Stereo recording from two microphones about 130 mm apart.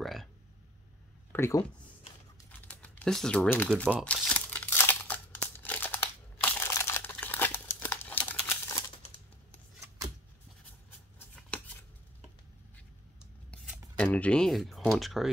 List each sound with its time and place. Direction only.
0.0 s a sound: centre (ahead or behind)
1.3 s speech: 20° left (ahead or behind)
2.6 s a sound: 10° left (ahead or behind)
3.6 s speech: 5° left (ahead or behind)
4.0 s crumpling: 10° left (ahead or behind)
10.9 s scissors: 10° left (ahead or behind)
13.9 s speech: 10° left (ahead or behind)